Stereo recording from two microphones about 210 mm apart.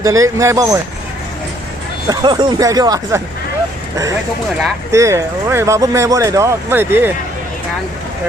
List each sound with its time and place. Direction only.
0.0 s speech: 15° right (ahead or behind)
2.0 s speech: 20° right (ahead or behind)
4.9 s speech: 15° right (ahead or behind)